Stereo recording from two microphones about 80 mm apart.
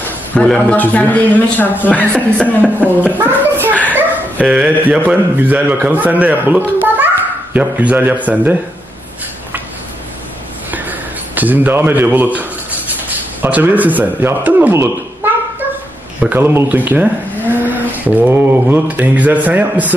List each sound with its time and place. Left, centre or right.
0.3 s speech: centre
3.2 s speech: right
3.9 s speech: centre
10.7 s a sound: right
13.4 s speech: right
16.2 s speech: right